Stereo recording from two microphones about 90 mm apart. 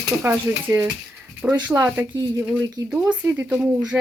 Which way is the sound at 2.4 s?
15° right (ahead or behind).